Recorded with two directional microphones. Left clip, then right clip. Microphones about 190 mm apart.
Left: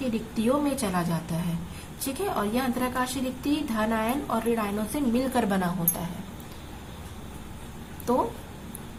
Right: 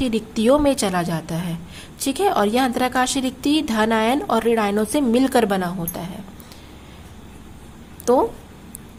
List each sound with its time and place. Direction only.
0.1 s a woman's voice: 50° right (ahead or behind); by 6.1 s 30° right (ahead or behind)